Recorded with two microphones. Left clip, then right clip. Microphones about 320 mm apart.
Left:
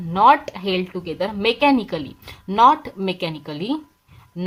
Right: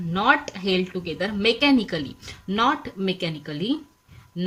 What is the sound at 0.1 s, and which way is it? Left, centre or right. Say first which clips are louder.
A woman's voice: left 6 dB; centre.